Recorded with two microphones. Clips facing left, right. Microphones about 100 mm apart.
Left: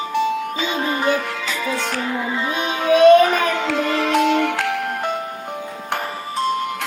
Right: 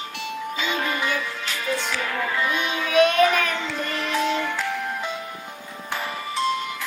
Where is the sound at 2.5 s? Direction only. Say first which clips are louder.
Left 4 dB; 45° left (ahead or behind).